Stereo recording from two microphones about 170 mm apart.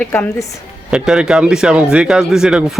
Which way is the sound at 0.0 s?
10° left (ahead or behind).